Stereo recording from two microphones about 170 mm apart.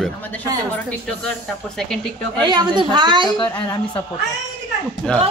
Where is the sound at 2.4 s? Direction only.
25° right (ahead or behind).